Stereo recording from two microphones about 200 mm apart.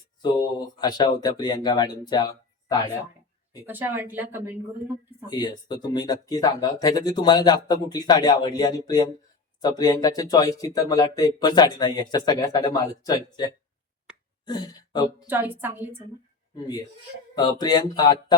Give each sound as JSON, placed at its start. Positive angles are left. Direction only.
{"t": 0.8, "sound": "speech", "side_deg": 20}
{"t": 3.7, "sound": "speech", "side_deg": -10}
{"t": 5.2, "sound": "speech", "side_deg": 20}
{"t": 15.3, "sound": "speech", "side_deg": -10}
{"t": 17.3, "sound": "speech", "side_deg": 20}